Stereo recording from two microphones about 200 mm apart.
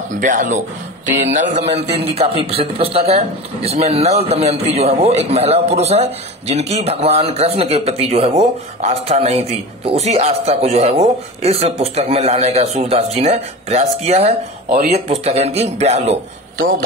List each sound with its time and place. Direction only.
0.2 s a man's voice: 40° right (ahead or behind)
16.5 s speech: 45° right (ahead or behind)